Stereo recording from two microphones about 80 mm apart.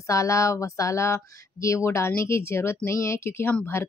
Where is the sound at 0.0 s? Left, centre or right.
Left.